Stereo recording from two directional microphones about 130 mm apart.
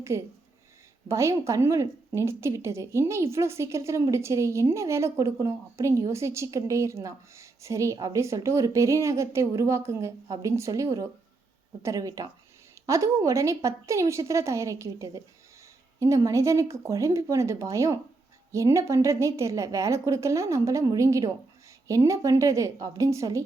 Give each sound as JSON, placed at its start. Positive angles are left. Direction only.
{"t": 0.1, "sound": "a woman's voice", "side_deg": -20}